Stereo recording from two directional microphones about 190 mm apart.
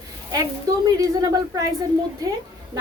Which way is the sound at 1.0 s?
20° right (ahead or behind).